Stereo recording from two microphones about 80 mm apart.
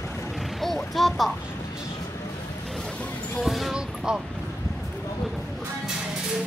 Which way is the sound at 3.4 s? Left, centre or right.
Centre.